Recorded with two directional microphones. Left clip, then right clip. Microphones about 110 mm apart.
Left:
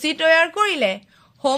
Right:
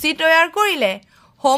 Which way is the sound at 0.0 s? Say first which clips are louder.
Right 2 dB; 45° right (ahead or behind).